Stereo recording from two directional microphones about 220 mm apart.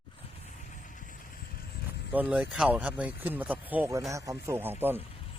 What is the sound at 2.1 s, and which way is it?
Speech, 5° right (ahead or behind).